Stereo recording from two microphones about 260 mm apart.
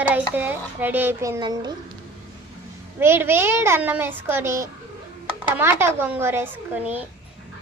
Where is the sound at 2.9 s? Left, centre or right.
Centre.